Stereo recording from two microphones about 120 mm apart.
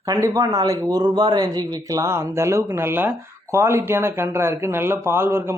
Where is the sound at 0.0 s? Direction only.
30° right (ahead or behind).